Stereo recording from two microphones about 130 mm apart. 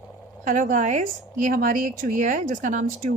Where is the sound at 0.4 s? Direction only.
85° right.